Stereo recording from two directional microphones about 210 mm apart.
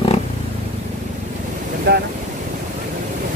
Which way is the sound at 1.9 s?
50° right (ahead or behind).